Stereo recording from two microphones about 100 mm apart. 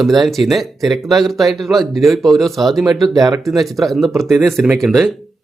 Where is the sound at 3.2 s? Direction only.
40° right (ahead or behind).